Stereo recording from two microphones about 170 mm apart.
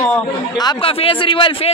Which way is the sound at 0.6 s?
30° left (ahead or behind).